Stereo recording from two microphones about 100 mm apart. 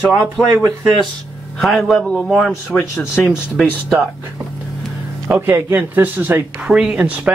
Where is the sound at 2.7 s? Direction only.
20° left (ahead or behind).